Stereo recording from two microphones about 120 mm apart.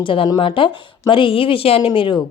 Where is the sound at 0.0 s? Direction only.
45° left (ahead or behind).